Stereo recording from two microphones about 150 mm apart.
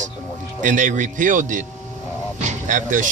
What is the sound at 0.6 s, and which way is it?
Speech, 60° right (ahead or behind).